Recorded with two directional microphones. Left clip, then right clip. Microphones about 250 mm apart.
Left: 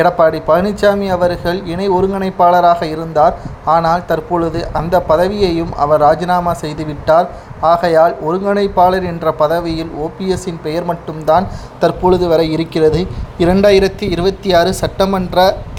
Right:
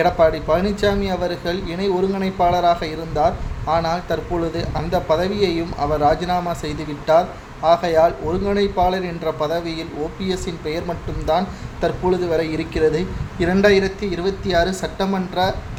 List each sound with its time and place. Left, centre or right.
0.0 s speech: centre